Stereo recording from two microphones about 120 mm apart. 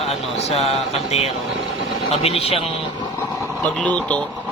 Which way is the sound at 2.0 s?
55° left (ahead or behind).